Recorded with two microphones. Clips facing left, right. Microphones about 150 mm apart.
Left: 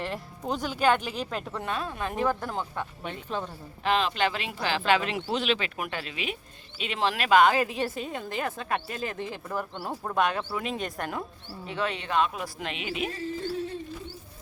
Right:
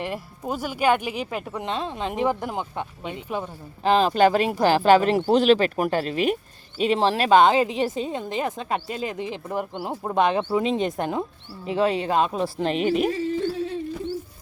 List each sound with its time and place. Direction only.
0.0 s speech: 10° right (ahead or behind)
1.6 s speech: 25° right (ahead or behind)
3.8 s speech: 35° right (ahead or behind)